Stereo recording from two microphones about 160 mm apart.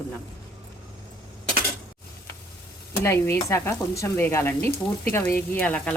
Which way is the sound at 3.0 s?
15° left (ahead or behind).